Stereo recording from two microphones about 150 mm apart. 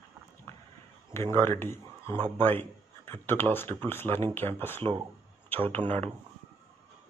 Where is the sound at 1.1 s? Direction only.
15° left (ahead or behind).